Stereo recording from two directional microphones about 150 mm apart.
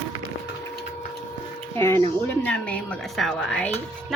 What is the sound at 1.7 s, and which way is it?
A woman's voice, 15° left (ahead or behind).